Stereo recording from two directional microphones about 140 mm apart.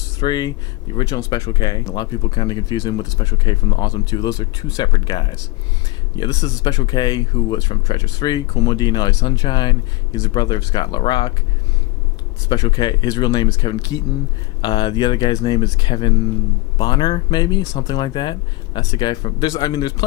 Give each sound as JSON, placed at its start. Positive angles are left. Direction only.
{"t": 0.2, "sound": "speech", "side_deg": 30}
{"t": 12.5, "sound": "speech", "side_deg": 30}